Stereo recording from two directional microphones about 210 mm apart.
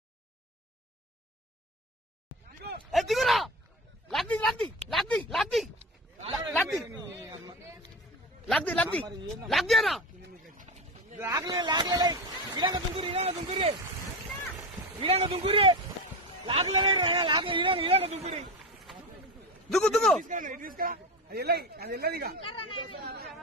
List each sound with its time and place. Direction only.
2.9 s a sound: centre (ahead or behind)
7.2 s a sound: 15° right (ahead or behind)
8.5 s a man's voice: 5° left (ahead or behind)
11.1 s speech: 15° right (ahead or behind)
15.0 s speech: 25° right (ahead or behind)
19.7 s a man's voice: 5° left (ahead or behind)
20.2 s a man's voice: 35° right (ahead or behind)